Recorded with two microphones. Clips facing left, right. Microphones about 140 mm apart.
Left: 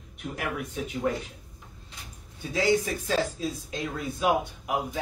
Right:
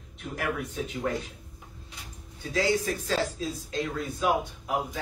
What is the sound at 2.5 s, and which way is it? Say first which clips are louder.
Speech: left 2 dB; 15° left (ahead or behind).